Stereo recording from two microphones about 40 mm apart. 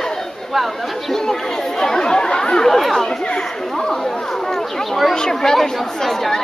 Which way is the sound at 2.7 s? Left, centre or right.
Centre.